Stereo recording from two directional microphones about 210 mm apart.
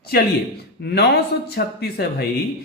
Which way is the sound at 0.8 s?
50° left (ahead or behind).